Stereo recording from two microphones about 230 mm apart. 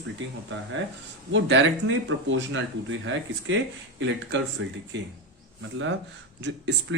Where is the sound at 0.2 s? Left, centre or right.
Right.